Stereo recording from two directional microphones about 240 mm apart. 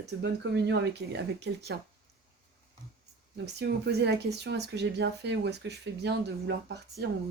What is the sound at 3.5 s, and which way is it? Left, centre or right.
Speech, right.